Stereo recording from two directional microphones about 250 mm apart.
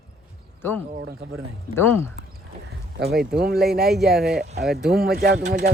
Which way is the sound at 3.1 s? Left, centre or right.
Right.